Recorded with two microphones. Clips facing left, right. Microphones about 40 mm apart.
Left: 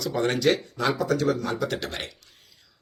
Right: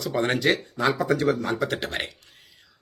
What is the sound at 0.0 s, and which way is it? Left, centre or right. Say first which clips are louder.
Speech: even; right.